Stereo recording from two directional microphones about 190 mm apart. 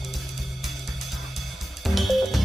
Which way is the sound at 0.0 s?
Centre (ahead or behind).